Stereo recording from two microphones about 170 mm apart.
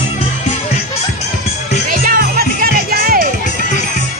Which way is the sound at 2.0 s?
60° right (ahead or behind).